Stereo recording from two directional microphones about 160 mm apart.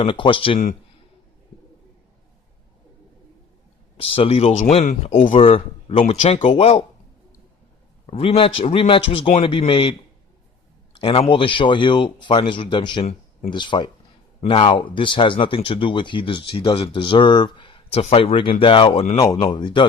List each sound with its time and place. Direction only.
0.0 s speech: 30° left (ahead or behind)
4.0 s speech: 35° left (ahead or behind)
6.0 s speech: 45° left (ahead or behind)
8.0 s speech: 35° left (ahead or behind)
10.9 s speech: 35° left (ahead or behind)
19.1 s speech: 20° left (ahead or behind)